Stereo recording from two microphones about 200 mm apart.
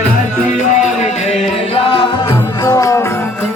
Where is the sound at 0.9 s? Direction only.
30° left (ahead or behind); by 3.1 s 15° left (ahead or behind).